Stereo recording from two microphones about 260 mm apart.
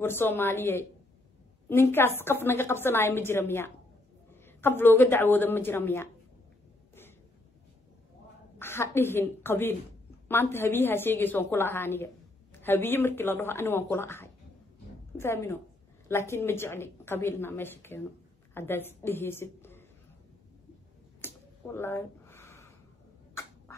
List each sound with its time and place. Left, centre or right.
0.0 s a woman's voice: centre
8.5 s a woman's voice: centre
21.2 s a sound: centre